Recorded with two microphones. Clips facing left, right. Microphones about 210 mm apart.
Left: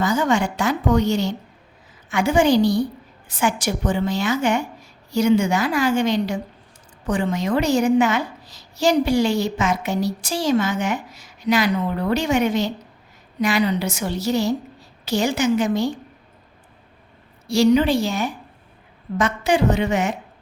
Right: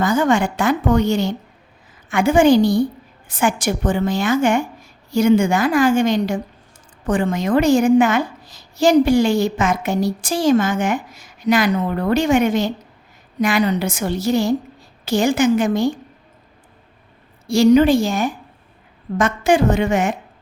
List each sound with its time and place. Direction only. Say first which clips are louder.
0.0 s a woman's voice: right 3 dB; 55° right (ahead or behind)
17.4 s a woman's voice: right 4 dB; 50° right (ahead or behind)